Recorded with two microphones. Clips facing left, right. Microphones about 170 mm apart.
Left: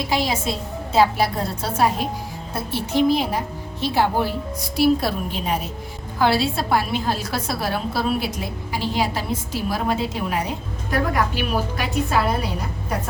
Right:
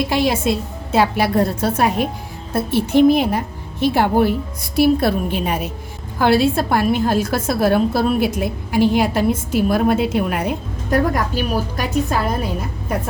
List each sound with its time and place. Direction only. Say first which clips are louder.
0.1 s a woman's voice: right 5 dB; 60° right (ahead or behind)
10.9 s a woman's voice: right 4 dB; 45° right (ahead or behind)